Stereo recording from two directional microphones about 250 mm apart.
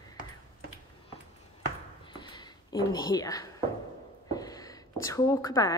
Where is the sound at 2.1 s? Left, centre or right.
Centre.